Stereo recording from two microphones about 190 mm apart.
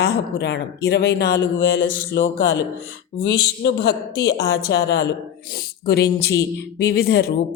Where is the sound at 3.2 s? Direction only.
60° left (ahead or behind).